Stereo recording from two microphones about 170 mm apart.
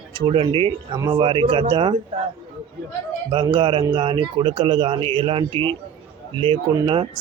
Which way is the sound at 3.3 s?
30° right (ahead or behind).